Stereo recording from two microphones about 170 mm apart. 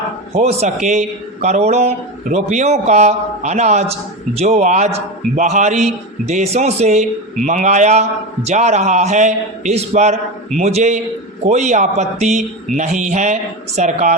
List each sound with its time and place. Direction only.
0.3 s a man's voice: 40° right (ahead or behind)